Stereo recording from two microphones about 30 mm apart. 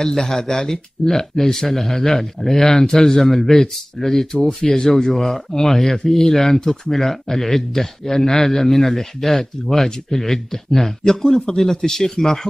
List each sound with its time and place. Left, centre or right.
0.0 s speech: centre
4.6 s speech: left
5.0 s speech: centre
11.5 s speech: centre